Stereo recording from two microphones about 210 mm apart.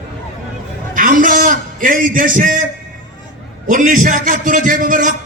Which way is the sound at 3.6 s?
35° right (ahead or behind).